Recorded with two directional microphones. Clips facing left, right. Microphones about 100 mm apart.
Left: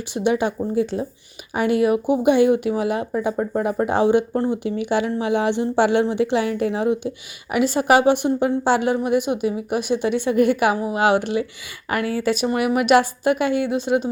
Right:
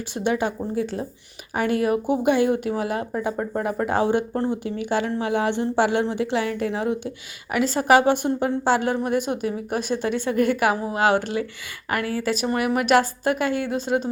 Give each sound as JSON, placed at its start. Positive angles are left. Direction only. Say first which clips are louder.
{"t": 0.1, "sound": "a woman's voice", "louder": "left 3 dB", "side_deg": 20}
{"t": 4.3, "sound": "speech", "louder": "left 3 dB", "side_deg": 5}
{"t": 4.6, "sound": "a woman's voice", "louder": "left 3 dB", "side_deg": 20}